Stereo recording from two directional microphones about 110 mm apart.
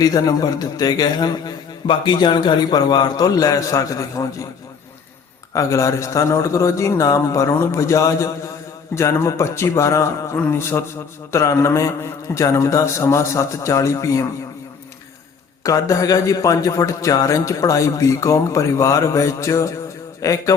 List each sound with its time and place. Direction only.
0.0 s a man's voice: 35° left (ahead or behind)
5.5 s a man's voice: 30° left (ahead or behind)
15.6 s a man's voice: 30° left (ahead or behind)